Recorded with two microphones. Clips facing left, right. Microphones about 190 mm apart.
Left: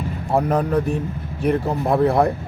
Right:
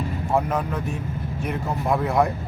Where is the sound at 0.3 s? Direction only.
35° left (ahead or behind).